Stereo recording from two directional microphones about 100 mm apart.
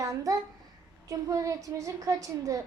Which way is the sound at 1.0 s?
35° right (ahead or behind).